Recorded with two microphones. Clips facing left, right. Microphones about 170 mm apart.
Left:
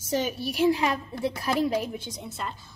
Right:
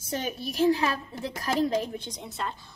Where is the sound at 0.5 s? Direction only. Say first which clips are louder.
Even; 15° left (ahead or behind).